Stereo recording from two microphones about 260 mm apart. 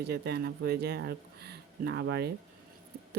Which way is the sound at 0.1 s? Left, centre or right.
Right.